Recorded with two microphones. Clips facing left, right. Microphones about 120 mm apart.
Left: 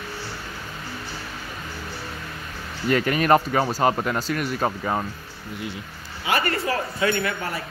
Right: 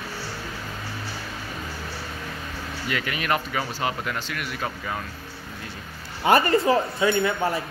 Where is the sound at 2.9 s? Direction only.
40° left (ahead or behind).